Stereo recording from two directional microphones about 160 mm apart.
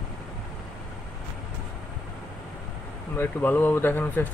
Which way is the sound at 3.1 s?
10° left (ahead or behind).